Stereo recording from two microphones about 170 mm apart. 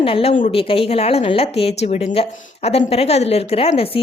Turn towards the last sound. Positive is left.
turn(degrees=35)  # may be behind; listen again after turning